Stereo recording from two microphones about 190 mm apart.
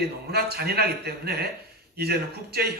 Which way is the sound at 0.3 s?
55° right (ahead or behind).